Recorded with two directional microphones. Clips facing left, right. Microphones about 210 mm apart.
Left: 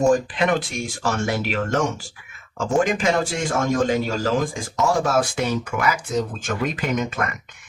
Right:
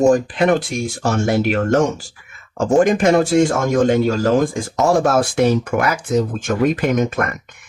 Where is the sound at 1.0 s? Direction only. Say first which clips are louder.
Right 6 dB; 45° right (ahead or behind).